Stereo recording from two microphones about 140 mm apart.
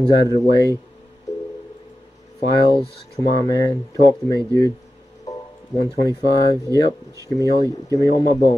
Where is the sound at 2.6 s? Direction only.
30° left (ahead or behind).